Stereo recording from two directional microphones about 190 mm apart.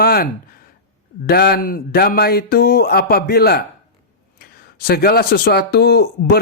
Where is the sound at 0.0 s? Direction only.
55° left (ahead or behind).